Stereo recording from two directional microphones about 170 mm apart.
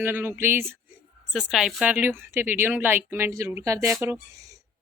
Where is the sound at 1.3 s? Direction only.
5° right (ahead or behind); by 3.9 s 20° right (ahead or behind).